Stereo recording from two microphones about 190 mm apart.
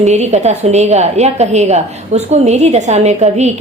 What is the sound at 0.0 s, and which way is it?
A woman's voice, 35° right (ahead or behind).